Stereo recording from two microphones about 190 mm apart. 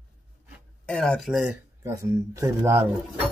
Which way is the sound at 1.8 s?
15° right (ahead or behind).